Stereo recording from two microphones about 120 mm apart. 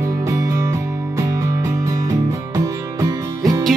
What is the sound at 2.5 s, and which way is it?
Music, 30° right (ahead or behind).